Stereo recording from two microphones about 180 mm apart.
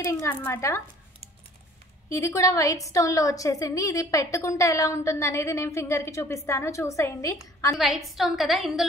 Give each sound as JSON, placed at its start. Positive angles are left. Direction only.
{"t": 0.0, "sound": "a woman's voice", "side_deg": 15}
{"t": 2.0, "sound": "a woman's voice", "side_deg": 15}
{"t": 7.7, "sound": "a woman's voice", "side_deg": 0}